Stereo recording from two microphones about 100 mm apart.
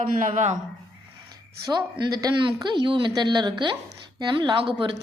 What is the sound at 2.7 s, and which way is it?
A woman's voice, 55° right (ahead or behind).